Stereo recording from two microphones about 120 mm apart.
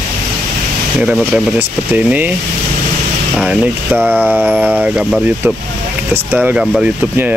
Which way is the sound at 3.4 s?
10° right (ahead or behind).